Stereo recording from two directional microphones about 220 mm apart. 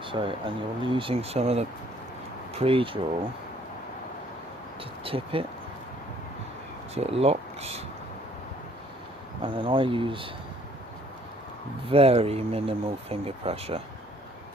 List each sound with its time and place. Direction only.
0.0 s speech: 25° right (ahead or behind)
4.8 s speech: 25° right (ahead or behind)
6.9 s speech: 30° right (ahead or behind)
9.4 s speech: 25° right (ahead or behind)
11.9 s speech: 25° right (ahead or behind)